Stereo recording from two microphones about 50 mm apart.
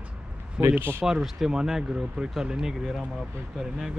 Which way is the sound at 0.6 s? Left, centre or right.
Right.